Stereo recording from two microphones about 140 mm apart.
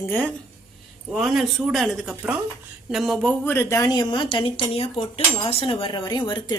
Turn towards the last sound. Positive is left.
turn(degrees=35)  # may be behind; listen again after turning